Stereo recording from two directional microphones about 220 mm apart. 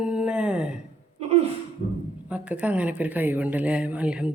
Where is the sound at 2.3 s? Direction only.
5° right (ahead or behind).